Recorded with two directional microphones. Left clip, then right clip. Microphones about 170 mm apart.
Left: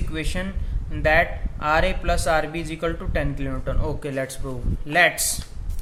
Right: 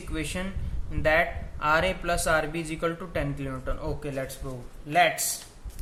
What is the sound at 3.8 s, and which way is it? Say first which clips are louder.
Speech: left 7 dB; 30° left (ahead or behind).